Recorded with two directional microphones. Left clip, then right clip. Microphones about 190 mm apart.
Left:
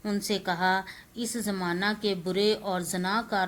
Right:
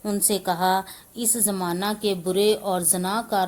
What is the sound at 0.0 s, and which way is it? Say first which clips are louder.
A woman's voice: right 5 dB; 50° right (ahead or behind).